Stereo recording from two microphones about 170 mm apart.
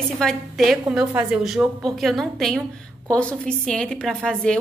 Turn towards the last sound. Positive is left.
turn(degrees=5)  # may be behind; listen again after turning